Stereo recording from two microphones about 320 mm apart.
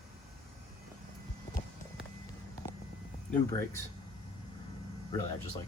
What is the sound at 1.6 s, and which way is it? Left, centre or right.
Walk, centre.